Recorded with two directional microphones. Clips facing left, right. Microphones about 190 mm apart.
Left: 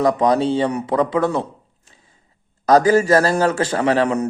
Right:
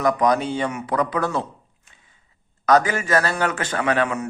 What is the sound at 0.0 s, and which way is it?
Speech, 25° left (ahead or behind).